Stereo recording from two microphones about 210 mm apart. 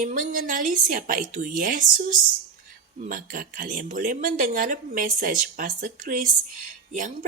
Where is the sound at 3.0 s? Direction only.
40° right (ahead or behind).